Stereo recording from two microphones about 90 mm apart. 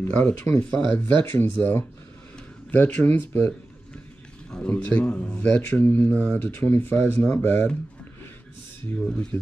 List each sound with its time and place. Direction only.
0.0 s a man's voice: 20° left (ahead or behind)
9.1 s speech: 15° left (ahead or behind)